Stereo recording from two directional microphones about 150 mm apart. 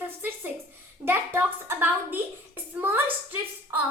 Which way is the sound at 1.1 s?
15° right (ahead or behind).